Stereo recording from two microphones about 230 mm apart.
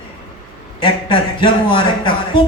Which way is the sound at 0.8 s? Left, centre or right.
Left.